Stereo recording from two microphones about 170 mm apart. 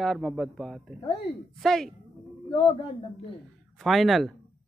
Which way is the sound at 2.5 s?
30° left (ahead or behind).